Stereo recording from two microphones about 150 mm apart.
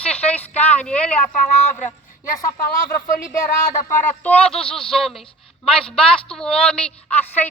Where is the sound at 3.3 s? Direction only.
20° left (ahead or behind).